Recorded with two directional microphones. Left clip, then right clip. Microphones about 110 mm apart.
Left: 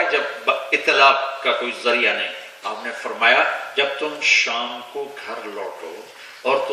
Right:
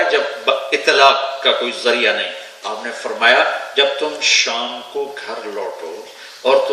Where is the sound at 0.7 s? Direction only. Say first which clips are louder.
Right 3 dB; 15° right (ahead or behind).